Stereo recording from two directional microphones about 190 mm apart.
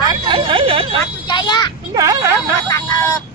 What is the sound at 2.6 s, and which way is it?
Speech, 15° left (ahead or behind).